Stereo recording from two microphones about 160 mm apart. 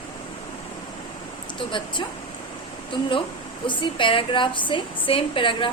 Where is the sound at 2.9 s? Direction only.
30° left (ahead or behind).